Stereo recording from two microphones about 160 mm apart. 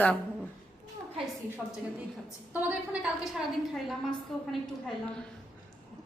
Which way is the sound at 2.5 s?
10° right (ahead or behind).